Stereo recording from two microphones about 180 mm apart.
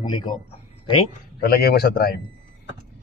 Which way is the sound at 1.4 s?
60° left (ahead or behind).